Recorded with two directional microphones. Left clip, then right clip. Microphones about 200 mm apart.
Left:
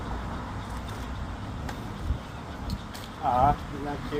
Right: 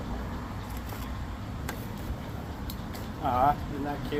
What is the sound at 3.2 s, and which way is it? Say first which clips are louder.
Speech: left 3 dB; 15° right (ahead or behind).